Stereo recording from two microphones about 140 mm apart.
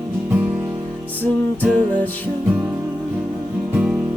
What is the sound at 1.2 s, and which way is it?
Music, 10° left (ahead or behind).